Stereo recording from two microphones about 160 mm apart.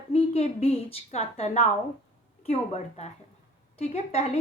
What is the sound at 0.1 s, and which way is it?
A woman's voice, 40° left (ahead or behind).